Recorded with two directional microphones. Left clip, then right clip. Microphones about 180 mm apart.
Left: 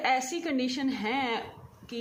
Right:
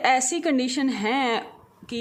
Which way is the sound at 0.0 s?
55° right (ahead or behind).